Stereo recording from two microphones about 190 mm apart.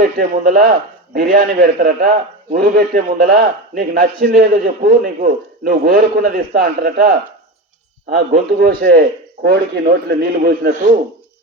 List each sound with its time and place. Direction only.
0.0 s a man's voice: 50° right (ahead or behind)
8.3 s a man's voice: 55° right (ahead or behind)